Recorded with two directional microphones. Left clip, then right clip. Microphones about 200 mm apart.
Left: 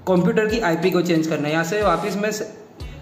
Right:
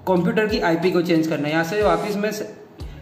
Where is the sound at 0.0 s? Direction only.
Centre (ahead or behind).